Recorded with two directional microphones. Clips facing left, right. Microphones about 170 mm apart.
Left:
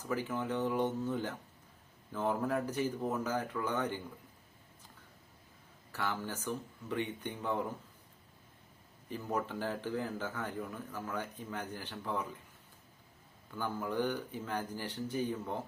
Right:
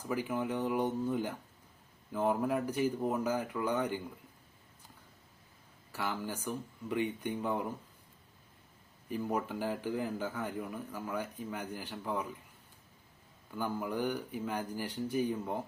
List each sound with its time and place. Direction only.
0.0 s a man's voice: 10° right (ahead or behind)
5.9 s a man's voice: 10° right (ahead or behind)
9.0 s a man's voice: 10° right (ahead or behind)
13.6 s a man's voice: 10° right (ahead or behind)